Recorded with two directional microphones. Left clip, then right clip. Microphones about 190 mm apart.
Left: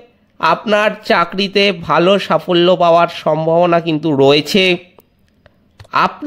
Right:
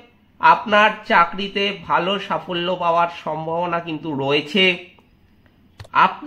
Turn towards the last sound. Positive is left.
turn(degrees=65)  # may be behind; listen again after turning